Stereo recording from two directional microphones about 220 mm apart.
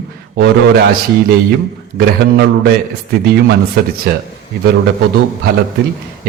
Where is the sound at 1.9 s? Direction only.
45° right (ahead or behind).